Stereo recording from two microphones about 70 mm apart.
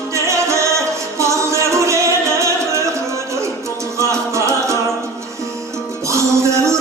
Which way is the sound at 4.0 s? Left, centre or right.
Right.